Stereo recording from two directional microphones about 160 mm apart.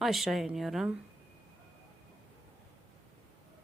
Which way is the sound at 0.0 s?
Centre (ahead or behind).